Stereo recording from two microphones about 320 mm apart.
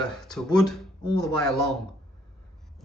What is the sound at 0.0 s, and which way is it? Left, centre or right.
Speech, centre.